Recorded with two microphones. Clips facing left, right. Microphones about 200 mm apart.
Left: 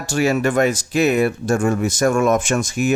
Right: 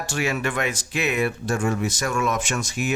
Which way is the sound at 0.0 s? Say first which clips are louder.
Left 7 dB; 40° left (ahead or behind).